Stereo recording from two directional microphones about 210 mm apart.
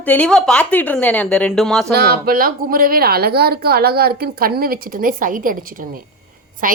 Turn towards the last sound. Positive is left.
turn(degrees=-40)  # may be behind; listen again after turning